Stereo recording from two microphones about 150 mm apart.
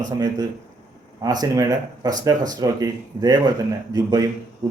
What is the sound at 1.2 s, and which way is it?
Speech, 25° right (ahead or behind).